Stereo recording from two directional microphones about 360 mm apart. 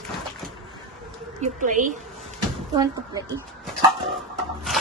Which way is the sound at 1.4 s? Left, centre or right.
Right.